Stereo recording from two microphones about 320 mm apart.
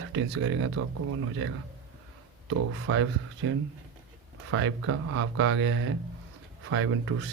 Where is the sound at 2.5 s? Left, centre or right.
Right.